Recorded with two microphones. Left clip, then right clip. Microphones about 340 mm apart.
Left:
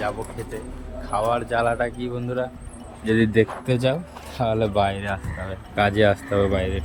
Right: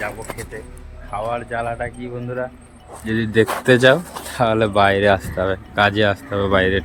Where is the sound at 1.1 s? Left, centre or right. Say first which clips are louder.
Left 2 dB; centre.